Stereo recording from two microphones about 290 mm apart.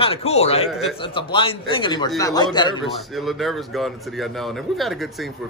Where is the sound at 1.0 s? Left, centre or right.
Centre.